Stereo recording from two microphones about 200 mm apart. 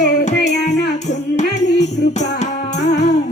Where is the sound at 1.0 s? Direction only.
35° left (ahead or behind).